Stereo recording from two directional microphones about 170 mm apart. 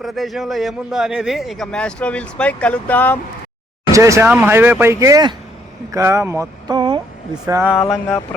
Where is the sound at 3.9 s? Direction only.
20° right (ahead or behind).